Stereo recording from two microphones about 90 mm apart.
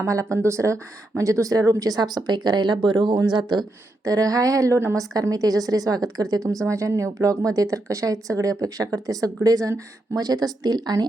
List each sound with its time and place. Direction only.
0.0 s speech: 35° right (ahead or behind); by 3.7 s 55° right (ahead or behind)
4.0 s speech: 40° right (ahead or behind)
5.1 s speech: 45° right (ahead or behind)